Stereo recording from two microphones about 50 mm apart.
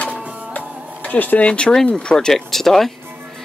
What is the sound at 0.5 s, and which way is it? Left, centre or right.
Music, left.